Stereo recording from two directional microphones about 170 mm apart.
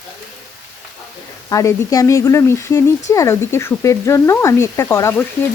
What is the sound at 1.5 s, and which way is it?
Speech, 20° left (ahead or behind).